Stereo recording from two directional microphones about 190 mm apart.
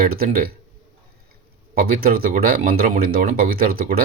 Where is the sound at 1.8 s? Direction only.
50° right (ahead or behind).